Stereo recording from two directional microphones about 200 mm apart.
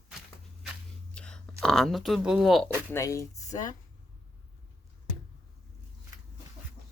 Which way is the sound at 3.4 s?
35° left (ahead or behind).